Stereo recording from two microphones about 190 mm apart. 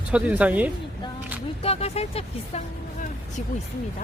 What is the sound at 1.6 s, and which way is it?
Speech, 30° left (ahead or behind).